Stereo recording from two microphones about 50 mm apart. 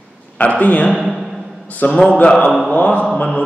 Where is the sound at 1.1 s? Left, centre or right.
Centre.